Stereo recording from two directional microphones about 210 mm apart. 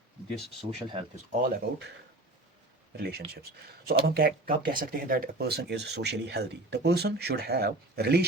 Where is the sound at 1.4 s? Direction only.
50° right (ahead or behind).